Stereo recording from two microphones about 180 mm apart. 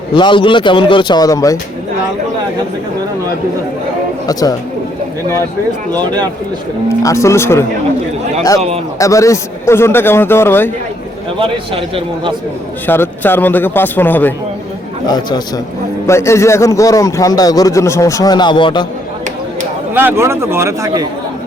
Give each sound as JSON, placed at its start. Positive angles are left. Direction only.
{"t": 0.1, "sound": "a man's voice", "side_deg": 25}
{"t": 4.3, "sound": "a man's voice", "side_deg": 20}
{"t": 6.8, "sound": "a man's voice", "side_deg": 15}
{"t": 9.0, "sound": "a man's voice", "side_deg": 15}
{"t": 11.3, "sound": "a man's voice", "side_deg": -30}
{"t": 12.9, "sound": "a man's voice", "side_deg": 10}
{"t": 15.0, "sound": "a man's voice", "side_deg": 25}
{"t": 19.9, "sound": "speech", "side_deg": -10}